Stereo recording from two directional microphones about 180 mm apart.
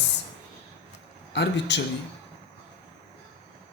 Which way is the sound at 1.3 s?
70° left (ahead or behind).